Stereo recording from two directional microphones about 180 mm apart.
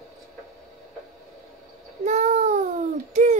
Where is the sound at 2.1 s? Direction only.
40° right (ahead or behind).